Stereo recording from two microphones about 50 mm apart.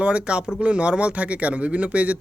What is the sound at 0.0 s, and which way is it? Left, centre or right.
Speech, right.